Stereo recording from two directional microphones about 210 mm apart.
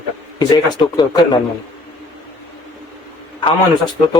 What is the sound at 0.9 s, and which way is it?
Speech, 20° left (ahead or behind).